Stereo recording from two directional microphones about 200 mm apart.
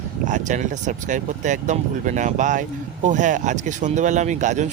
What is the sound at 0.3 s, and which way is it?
Speech, 40° right (ahead or behind).